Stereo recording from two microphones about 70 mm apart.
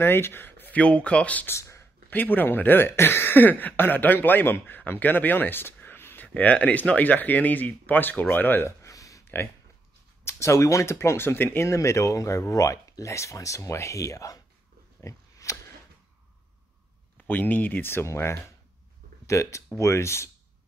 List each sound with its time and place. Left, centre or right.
0.0 s speech: left
1.5 s a sound: left
2.0 s speech: left
6.2 s speech: left
8.6 s a sound: left
10.2 s speech: left
11.7 s speech: left
15.0 s a sound: left
17.3 s speech: left